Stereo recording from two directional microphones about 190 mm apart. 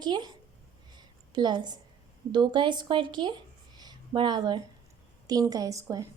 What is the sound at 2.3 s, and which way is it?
Speech, 25° right (ahead or behind).